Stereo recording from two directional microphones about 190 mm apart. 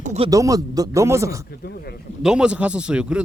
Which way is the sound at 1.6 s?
55° left (ahead or behind).